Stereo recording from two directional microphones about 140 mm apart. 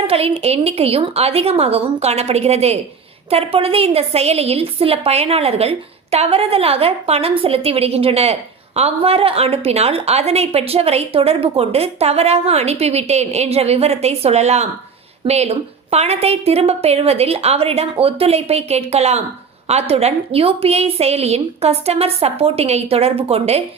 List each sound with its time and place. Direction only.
0.1 s a woman's voice: 45° right (ahead or behind)